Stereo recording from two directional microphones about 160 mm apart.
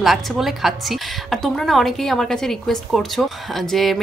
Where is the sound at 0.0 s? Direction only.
Centre (ahead or behind).